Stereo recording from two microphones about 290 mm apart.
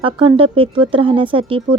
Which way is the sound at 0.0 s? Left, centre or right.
Centre.